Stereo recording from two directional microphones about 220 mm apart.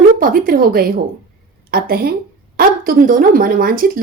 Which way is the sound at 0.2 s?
40° right (ahead or behind).